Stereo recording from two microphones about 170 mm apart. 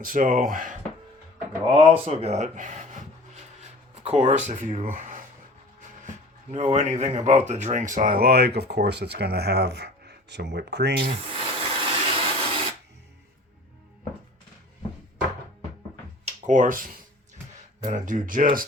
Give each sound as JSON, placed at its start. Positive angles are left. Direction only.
{"t": 0.0, "sound": "speech", "side_deg": -50}
{"t": 1.7, "sound": "speech", "side_deg": -35}
{"t": 4.0, "sound": "speech", "side_deg": -40}
{"t": 6.5, "sound": "speech", "side_deg": -40}
{"t": 11.8, "sound": "a sound", "side_deg": -30}
{"t": 16.2, "sound": "speech", "side_deg": -50}